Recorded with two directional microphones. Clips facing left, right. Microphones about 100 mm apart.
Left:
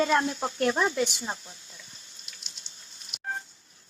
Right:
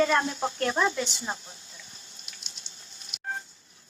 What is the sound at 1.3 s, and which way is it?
Speech, 30° right (ahead or behind).